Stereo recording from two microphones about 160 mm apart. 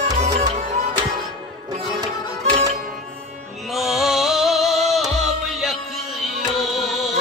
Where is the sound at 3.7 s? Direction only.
Centre (ahead or behind).